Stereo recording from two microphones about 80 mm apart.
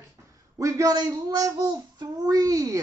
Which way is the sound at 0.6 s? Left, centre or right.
Right.